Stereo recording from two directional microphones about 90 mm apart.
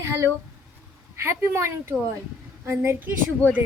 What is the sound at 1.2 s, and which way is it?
A woman's voice, 30° right (ahead or behind).